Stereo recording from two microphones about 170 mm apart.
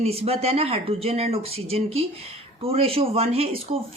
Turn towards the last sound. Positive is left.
turn(degrees=-35)  # may be behind; listen again after turning